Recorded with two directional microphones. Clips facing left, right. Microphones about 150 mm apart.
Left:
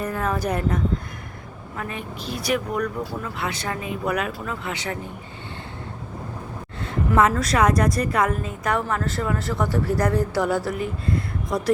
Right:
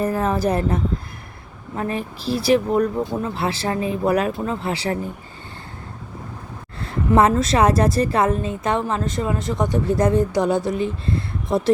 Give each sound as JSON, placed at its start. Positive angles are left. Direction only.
{"t": 0.0, "sound": "a woman's voice", "side_deg": -30}
{"t": 6.8, "sound": "a woman's voice", "side_deg": -30}